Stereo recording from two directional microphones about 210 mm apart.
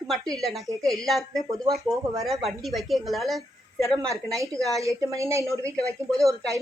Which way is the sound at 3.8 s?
15° right (ahead or behind).